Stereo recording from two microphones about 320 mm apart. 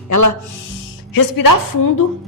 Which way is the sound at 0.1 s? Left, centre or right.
Left.